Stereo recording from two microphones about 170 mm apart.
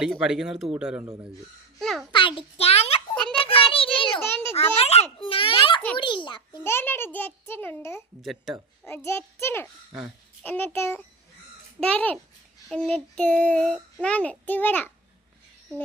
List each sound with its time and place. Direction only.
0.0 s speech: 5° right (ahead or behind)
2.1 s a child's voice: 30° left (ahead or behind)
3.3 s a sound: 30° left (ahead or behind)
4.2 s a sound: 10° left (ahead or behind)
4.8 s a child's voice: 35° left (ahead or behind)
6.6 s a child's voice: 15° left (ahead or behind)
8.2 s speech: centre (ahead or behind)
8.9 s a child's voice: 15° left (ahead or behind)